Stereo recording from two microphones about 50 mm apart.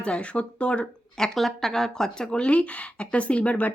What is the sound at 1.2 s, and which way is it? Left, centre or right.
A woman's voice, centre.